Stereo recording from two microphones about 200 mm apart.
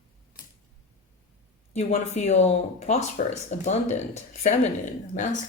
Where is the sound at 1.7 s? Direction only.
35° left (ahead or behind).